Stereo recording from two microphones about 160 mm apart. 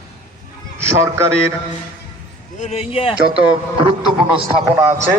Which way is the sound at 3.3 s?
35° right (ahead or behind).